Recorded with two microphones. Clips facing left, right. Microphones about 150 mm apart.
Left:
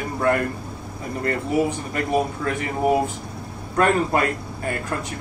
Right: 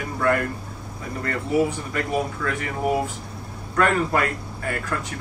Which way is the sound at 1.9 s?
25° left (ahead or behind).